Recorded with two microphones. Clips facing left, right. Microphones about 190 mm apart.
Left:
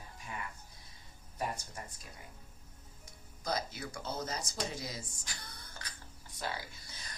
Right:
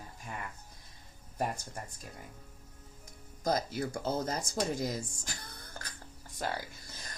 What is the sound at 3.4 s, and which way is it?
Speech, 45° right (ahead or behind).